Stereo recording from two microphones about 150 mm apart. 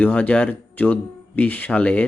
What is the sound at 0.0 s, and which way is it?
Speech, 10° left (ahead or behind).